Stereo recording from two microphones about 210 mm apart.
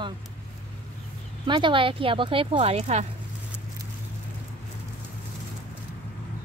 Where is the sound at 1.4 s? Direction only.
25° right (ahead or behind).